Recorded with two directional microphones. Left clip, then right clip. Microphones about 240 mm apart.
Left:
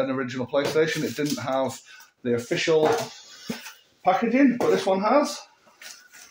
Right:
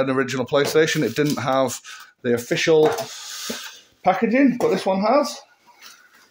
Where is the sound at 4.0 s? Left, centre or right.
Right.